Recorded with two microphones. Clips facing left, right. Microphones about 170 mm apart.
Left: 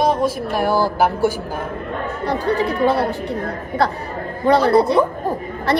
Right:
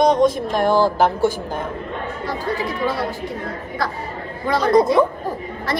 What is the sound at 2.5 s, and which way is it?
Speech, 50° left (ahead or behind).